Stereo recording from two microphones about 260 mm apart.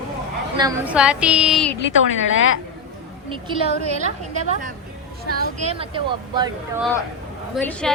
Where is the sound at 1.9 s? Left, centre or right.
Left.